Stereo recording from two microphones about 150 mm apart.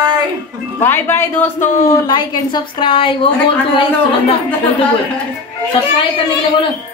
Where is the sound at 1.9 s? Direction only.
30° left (ahead or behind).